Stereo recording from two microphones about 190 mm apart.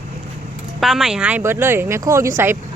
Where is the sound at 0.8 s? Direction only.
Centre (ahead or behind).